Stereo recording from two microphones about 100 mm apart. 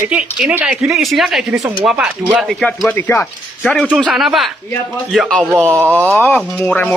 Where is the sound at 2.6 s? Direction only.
15° left (ahead or behind).